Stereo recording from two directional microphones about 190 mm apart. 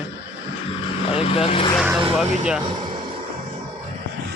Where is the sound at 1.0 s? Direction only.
30° left (ahead or behind).